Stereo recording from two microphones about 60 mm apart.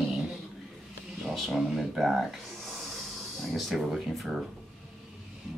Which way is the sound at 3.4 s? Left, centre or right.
Centre.